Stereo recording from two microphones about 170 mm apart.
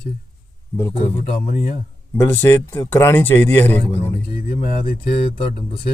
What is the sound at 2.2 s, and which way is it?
Speech, 15° left (ahead or behind).